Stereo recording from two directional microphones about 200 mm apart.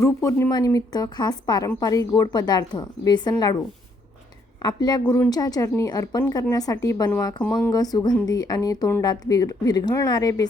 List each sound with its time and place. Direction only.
0.0 s speech: 15° left (ahead or behind)
4.6 s a woman's voice: 20° left (ahead or behind)